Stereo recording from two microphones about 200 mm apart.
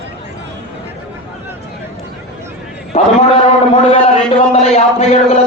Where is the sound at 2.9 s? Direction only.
30° left (ahead or behind).